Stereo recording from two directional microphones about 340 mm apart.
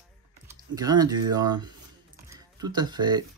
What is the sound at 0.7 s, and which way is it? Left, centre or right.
Speech, centre.